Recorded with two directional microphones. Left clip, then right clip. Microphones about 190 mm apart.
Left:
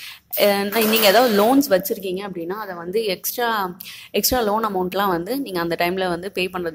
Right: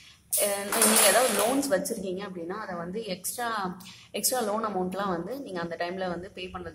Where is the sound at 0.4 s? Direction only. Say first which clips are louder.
Left 10 dB; 40° left (ahead or behind).